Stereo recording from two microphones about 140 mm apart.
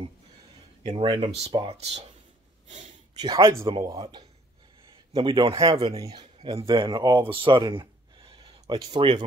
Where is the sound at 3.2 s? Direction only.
25° right (ahead or behind).